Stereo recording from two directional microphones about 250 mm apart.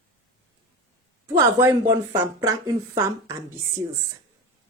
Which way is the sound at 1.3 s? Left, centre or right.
Centre.